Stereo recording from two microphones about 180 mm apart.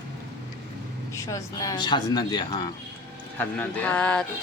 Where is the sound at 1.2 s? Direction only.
20° left (ahead or behind).